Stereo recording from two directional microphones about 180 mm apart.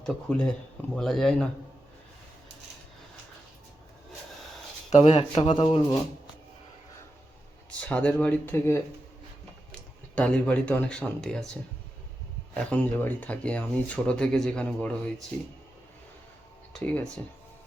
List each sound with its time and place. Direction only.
0.0 s speech: 5° left (ahead or behind)
4.9 s speech: 35° left (ahead or behind)
7.7 s speech: 5° left (ahead or behind)
10.2 s speech: 5° left (ahead or behind)
12.7 s speech: 10° left (ahead or behind)
16.8 s speech: 5° left (ahead or behind)